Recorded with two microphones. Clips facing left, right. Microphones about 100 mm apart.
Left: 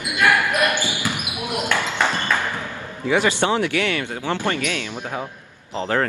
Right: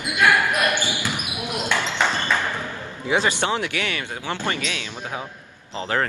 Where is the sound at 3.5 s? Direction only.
55° left (ahead or behind).